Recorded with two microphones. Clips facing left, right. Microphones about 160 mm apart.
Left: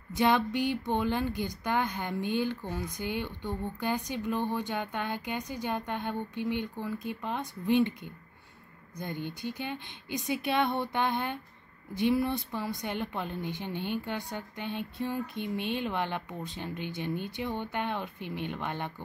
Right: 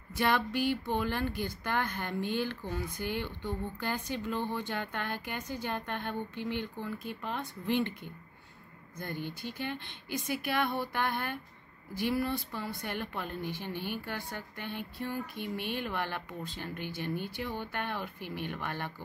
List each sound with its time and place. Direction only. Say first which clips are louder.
0.1 s speech: left 4 dB; 20° left (ahead or behind)